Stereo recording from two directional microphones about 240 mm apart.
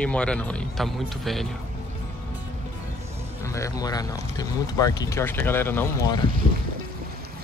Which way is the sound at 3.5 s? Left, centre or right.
Centre.